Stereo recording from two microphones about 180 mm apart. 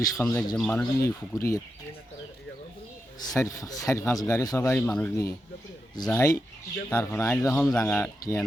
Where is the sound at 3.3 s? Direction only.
15° left (ahead or behind).